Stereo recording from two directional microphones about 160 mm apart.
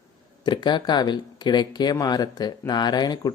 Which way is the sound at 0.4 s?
30° left (ahead or behind).